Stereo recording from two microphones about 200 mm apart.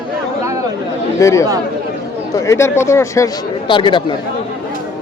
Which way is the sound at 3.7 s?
25° left (ahead or behind).